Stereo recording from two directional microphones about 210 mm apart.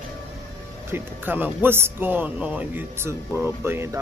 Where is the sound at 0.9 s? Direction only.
10° right (ahead or behind).